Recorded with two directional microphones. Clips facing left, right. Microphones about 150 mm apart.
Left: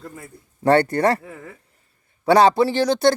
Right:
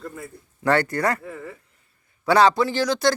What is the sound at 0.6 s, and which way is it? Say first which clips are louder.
Speech: left 5 dB; 30° left (ahead or behind).